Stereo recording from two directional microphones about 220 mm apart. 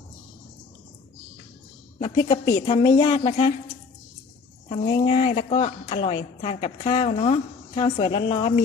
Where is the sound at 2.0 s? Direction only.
20° left (ahead or behind).